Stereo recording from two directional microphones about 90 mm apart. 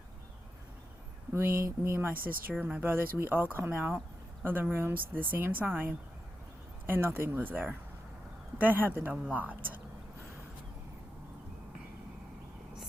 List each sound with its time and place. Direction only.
1.3 s speech: 30° right (ahead or behind)